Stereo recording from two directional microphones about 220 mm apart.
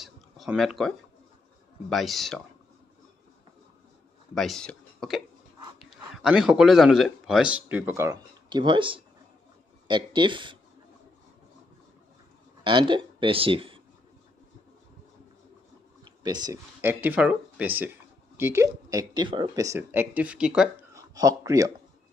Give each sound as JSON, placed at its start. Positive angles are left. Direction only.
{"t": 0.0, "sound": "a sound", "side_deg": 0}
{"t": 1.9, "sound": "speech", "side_deg": 0}
{"t": 4.4, "sound": "speech", "side_deg": 0}
{"t": 12.6, "sound": "speech", "side_deg": -20}
{"t": 16.0, "sound": "speech", "side_deg": -20}
{"t": 20.9, "sound": "speech", "side_deg": -15}